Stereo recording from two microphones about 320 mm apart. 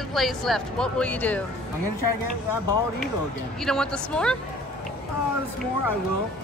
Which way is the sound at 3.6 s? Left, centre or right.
Centre.